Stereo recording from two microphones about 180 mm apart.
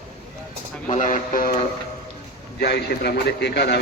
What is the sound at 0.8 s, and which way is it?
Speech, 45° left (ahead or behind).